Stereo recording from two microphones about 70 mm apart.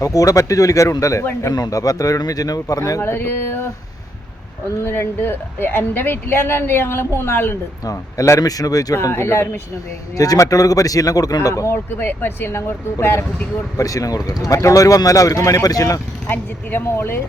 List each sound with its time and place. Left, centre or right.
0.0 s speech: left
3.0 s speech: left
4.8 s speech: left
7.9 s speech: left
9.0 s speech: left
10.2 s speech: left
11.7 s speech: left
13.7 s speech: left
14.6 s speech: left
16.3 s speech: left